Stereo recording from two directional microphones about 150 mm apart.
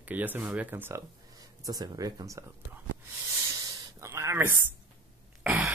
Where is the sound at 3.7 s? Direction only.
20° right (ahead or behind).